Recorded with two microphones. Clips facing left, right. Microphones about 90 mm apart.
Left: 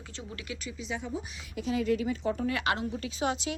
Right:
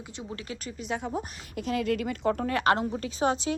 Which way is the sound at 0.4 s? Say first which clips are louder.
Right 1 dB; 35° right (ahead or behind).